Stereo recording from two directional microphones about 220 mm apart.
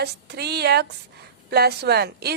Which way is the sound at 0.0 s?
50° right (ahead or behind).